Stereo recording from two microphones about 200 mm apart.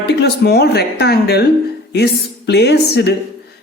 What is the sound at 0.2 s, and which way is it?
Speech, 55° left (ahead or behind).